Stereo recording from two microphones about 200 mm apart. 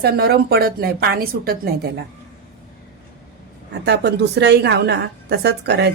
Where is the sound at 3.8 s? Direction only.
55° right (ahead or behind).